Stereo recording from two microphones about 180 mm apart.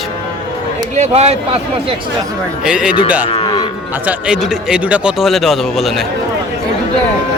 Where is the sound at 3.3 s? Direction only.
25° left (ahead or behind).